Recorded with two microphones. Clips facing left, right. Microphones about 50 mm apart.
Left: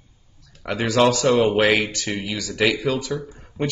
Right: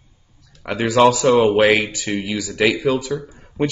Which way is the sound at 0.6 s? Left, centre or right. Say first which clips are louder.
Right 4 dB; centre.